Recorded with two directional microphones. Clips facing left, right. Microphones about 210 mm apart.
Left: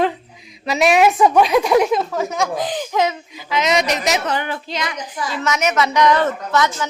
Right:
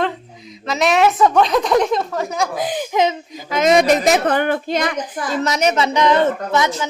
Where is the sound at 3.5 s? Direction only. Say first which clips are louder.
Right 5 dB; 50° right (ahead or behind); by 6.6 s 25° right (ahead or behind).